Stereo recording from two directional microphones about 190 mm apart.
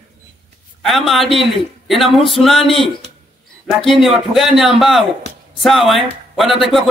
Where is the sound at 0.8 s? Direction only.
Centre (ahead or behind).